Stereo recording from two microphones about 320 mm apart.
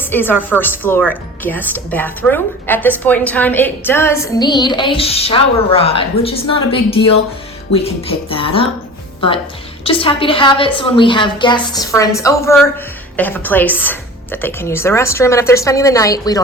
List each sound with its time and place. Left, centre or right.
0.0 s a woman's voice: centre
9.8 s speech: centre